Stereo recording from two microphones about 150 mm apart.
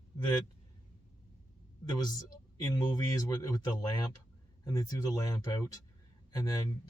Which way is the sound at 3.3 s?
25° left (ahead or behind).